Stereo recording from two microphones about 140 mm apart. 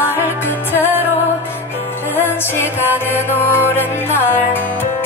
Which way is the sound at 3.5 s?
15° left (ahead or behind).